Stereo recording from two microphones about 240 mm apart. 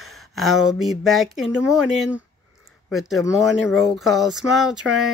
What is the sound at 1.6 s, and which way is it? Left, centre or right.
Speech, centre.